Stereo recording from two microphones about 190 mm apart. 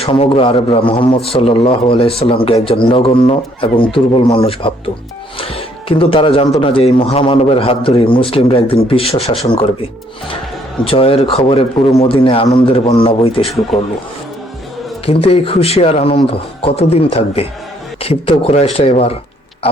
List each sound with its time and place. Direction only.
0.0 s a man's voice: 30° left (ahead or behind)
13.7 s speech: centre (ahead or behind)
15.0 s speech: 30° left (ahead or behind)